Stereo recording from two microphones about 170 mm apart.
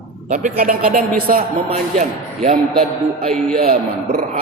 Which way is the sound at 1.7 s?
40° right (ahead or behind).